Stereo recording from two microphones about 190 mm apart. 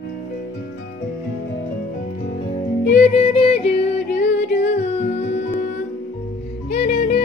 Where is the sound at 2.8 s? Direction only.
40° left (ahead or behind).